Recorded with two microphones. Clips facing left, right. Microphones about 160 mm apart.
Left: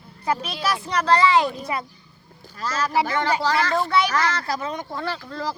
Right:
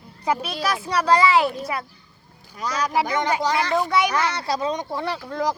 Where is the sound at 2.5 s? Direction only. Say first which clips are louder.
Even; 15° right (ahead or behind).